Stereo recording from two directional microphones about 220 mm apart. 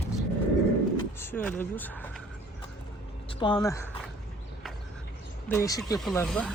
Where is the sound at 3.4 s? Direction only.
20° left (ahead or behind).